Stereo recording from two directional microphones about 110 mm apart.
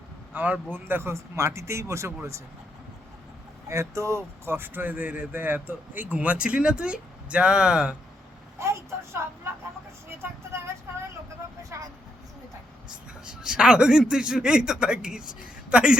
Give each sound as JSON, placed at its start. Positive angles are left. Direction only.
{"t": 0.3, "sound": "speech", "side_deg": -15}
{"t": 3.7, "sound": "speech", "side_deg": -25}
{"t": 8.5, "sound": "a sound", "side_deg": -25}
{"t": 11.7, "sound": "speech", "side_deg": -25}
{"t": 13.2, "sound": "speech", "side_deg": -10}